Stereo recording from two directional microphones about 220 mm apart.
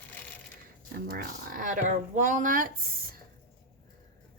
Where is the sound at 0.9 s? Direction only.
45° right (ahead or behind).